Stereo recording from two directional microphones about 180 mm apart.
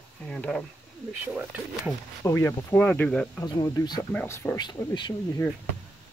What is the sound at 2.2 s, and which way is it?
Speech, 15° left (ahead or behind).